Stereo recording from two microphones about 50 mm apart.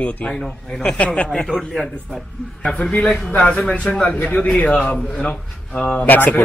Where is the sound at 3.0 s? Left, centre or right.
Centre.